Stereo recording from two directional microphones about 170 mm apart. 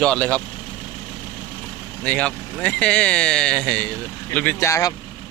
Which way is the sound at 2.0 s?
10° left (ahead or behind).